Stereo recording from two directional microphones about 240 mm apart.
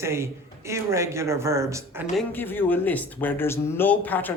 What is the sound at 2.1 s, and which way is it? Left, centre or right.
Speech, centre.